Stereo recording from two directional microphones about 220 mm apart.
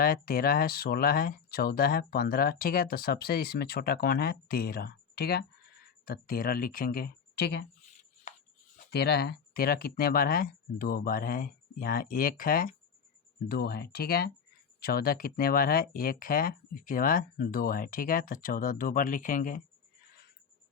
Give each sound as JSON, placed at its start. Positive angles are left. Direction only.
{"t": 0.0, "sound": "speech", "side_deg": 40}
{"t": 8.3, "sound": "a sound", "side_deg": 35}
{"t": 8.8, "sound": "speech", "side_deg": 45}